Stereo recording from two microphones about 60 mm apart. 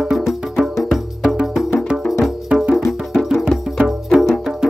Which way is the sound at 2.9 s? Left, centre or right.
Centre.